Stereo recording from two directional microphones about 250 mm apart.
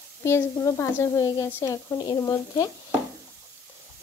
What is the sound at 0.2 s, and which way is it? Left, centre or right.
A woman's voice, centre.